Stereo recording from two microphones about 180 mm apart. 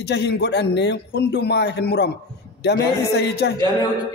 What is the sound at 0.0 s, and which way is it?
A man's voice, 70° left (ahead or behind).